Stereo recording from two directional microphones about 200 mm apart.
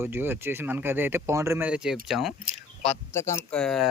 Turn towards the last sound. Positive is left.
turn(degrees=0)  # may be behind; listen again after turning